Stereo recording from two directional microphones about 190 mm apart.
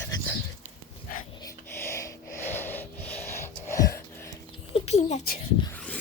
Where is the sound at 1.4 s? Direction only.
15° left (ahead or behind).